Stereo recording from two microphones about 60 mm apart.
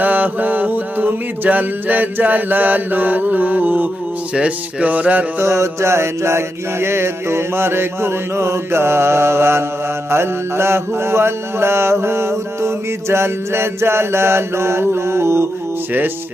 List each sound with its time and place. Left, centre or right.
0.0 s mantra: right
5.4 s mantra: right